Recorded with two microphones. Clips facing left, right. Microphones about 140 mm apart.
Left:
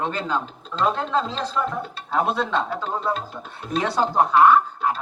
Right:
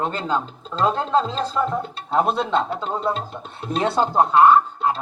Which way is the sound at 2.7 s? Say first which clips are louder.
Right 1 dB; 25° right (ahead or behind).